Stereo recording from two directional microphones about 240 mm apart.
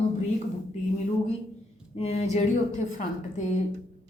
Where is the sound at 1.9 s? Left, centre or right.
Left.